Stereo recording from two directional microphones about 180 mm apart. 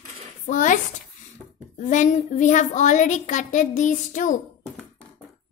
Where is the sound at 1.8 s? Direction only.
45° left (ahead or behind).